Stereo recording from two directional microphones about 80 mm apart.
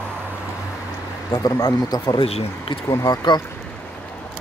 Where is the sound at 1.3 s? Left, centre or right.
Left.